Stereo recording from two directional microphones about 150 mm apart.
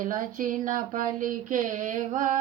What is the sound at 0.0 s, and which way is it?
Female singing, 65° right (ahead or behind).